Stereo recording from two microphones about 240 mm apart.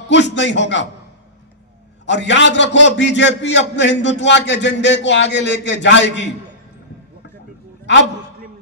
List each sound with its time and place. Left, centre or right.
0.1 s a man's voice: left
2.0 s a man's voice: left